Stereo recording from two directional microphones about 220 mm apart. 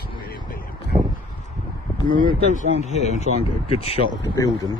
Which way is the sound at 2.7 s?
30° left (ahead or behind).